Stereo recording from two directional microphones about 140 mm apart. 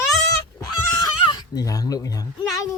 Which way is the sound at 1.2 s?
30° left (ahead or behind).